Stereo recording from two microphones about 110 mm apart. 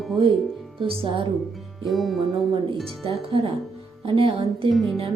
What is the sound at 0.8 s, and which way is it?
Speech, 50° right (ahead or behind).